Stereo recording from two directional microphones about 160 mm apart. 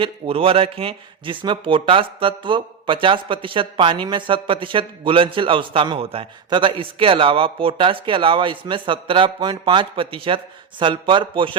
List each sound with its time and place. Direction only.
0.0 s speech: 35° right (ahead or behind)